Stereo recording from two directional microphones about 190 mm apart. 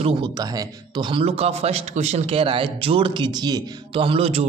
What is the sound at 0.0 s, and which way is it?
Speech, 20° right (ahead or behind).